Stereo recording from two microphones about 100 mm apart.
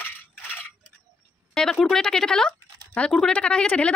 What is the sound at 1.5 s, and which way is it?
Speech, 5° left (ahead or behind).